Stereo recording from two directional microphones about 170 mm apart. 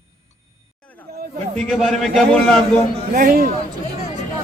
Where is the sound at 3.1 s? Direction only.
60° right (ahead or behind).